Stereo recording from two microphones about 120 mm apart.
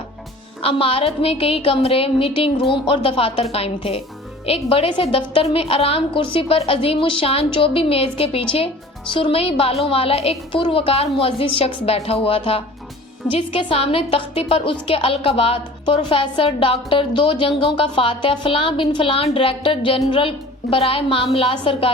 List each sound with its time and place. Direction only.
0.6 s a woman's voice: 50° left (ahead or behind)